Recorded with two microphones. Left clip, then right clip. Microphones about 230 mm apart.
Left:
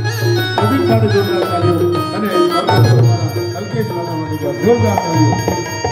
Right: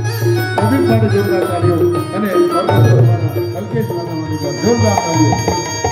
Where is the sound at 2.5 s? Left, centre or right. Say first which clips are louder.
Even; right.